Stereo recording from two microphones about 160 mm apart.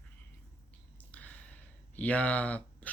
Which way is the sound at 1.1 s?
10° left (ahead or behind).